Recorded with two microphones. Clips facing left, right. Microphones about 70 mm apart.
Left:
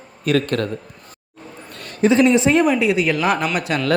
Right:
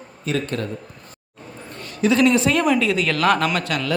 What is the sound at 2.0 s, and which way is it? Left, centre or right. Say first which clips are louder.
Speech: left 3 dB; left.